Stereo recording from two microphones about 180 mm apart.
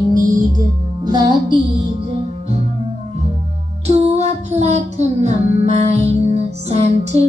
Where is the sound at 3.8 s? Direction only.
35° right (ahead or behind).